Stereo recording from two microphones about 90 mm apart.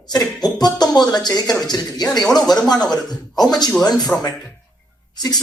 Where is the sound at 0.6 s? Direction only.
50° left (ahead or behind).